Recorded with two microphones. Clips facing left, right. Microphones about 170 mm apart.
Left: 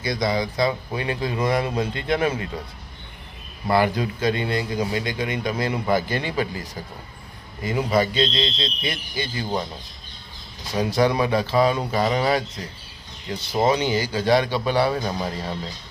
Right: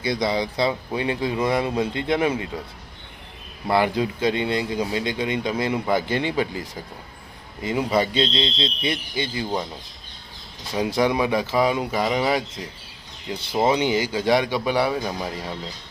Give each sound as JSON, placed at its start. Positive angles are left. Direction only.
{"t": 0.0, "sound": "speech", "side_deg": -30}
{"t": 3.7, "sound": "speech", "side_deg": -20}
{"t": 7.6, "sound": "speech", "side_deg": -20}
{"t": 10.8, "sound": "speech", "side_deg": -15}